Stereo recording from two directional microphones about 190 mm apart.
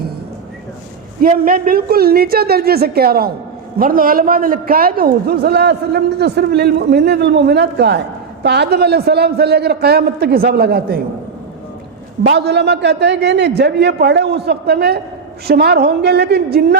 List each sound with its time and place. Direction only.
1.2 s a man's voice: 50° right (ahead or behind)
12.2 s a man's voice: 65° right (ahead or behind)